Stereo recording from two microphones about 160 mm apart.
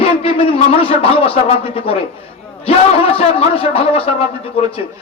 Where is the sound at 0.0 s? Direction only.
35° left (ahead or behind).